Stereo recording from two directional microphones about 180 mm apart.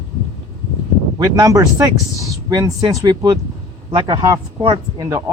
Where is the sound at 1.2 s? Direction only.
20° right (ahead or behind).